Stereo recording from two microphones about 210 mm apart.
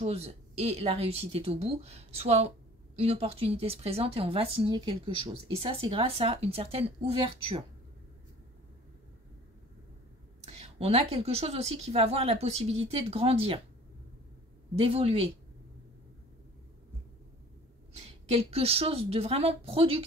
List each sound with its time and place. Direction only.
0.0 s a woman's voice: 30° right (ahead or behind)
10.4 s a woman's voice: 30° right (ahead or behind)
14.8 s a woman's voice: 30° right (ahead or behind)
17.9 s a woman's voice: 30° right (ahead or behind)